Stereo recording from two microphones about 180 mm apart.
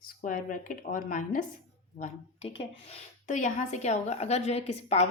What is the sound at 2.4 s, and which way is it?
A woman's voice, 35° left (ahead or behind).